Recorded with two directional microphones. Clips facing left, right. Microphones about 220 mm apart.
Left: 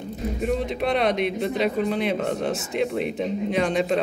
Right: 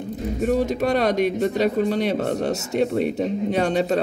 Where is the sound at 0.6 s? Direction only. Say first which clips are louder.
Right 3 dB; 40° right (ahead or behind).